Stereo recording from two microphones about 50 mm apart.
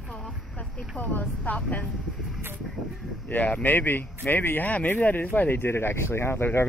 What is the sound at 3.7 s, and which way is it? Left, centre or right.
Speech, left.